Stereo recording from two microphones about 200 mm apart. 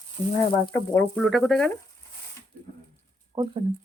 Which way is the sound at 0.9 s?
5° left (ahead or behind).